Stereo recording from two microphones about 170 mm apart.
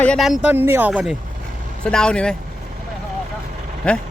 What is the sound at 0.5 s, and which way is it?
Speech, 10° right (ahead or behind).